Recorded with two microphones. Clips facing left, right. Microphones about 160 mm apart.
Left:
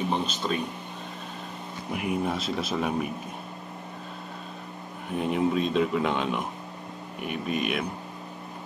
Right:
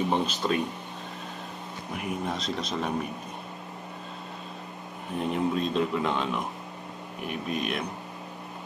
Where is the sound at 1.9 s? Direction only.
5° left (ahead or behind).